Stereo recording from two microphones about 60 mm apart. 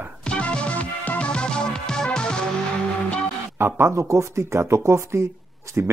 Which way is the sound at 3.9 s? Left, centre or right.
Right.